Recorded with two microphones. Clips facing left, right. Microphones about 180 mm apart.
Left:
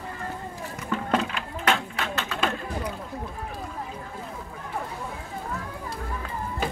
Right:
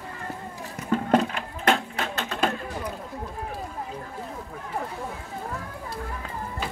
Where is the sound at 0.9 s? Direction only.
40° right (ahead or behind).